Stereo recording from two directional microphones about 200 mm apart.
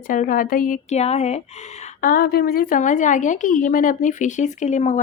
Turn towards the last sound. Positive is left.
turn(degrees=35)  # may be behind; listen again after turning